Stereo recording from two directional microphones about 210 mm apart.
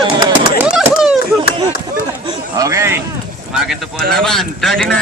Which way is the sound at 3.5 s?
Centre (ahead or behind).